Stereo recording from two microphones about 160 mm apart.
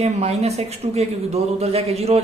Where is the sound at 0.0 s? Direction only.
40° right (ahead or behind).